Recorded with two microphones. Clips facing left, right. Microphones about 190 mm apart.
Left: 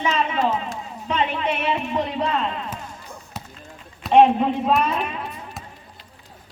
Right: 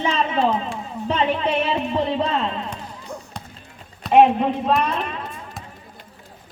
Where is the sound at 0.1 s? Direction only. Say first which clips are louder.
Right 1 dB; 40° left (ahead or behind).